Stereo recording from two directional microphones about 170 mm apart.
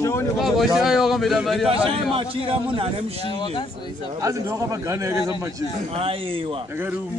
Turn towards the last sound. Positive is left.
turn(degrees=-30)  # may be behind; listen again after turning